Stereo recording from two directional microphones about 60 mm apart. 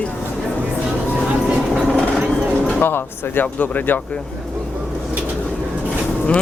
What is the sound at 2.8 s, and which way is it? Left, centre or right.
Speech, left.